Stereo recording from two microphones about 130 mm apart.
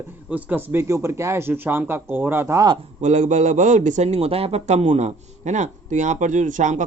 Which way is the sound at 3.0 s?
65° right (ahead or behind).